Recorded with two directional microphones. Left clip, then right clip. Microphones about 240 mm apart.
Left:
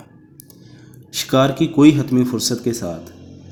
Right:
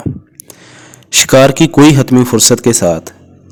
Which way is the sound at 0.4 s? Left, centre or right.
Right.